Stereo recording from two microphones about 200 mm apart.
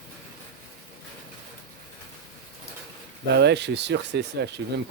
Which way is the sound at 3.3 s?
60° right (ahead or behind).